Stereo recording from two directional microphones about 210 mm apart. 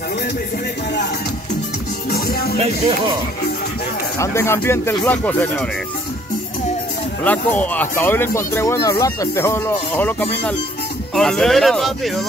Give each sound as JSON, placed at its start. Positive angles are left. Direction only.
{"t": 2.0, "sound": "music", "side_deg": 45}
{"t": 4.2, "sound": "speech", "side_deg": 10}
{"t": 7.2, "sound": "speech", "side_deg": 5}